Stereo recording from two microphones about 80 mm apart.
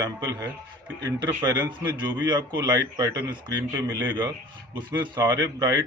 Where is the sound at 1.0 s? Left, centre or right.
Right.